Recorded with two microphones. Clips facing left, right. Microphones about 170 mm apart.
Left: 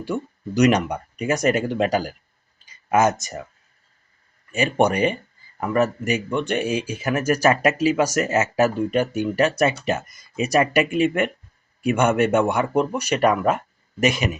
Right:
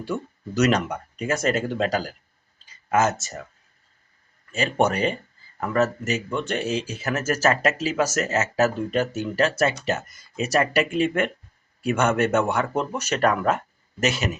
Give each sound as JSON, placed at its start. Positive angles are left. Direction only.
{"t": 0.0, "sound": "speech", "side_deg": 15}
{"t": 4.5, "sound": "speech", "side_deg": 15}